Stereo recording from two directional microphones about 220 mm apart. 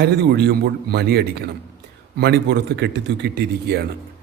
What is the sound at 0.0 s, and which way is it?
A man's voice, 50° right (ahead or behind).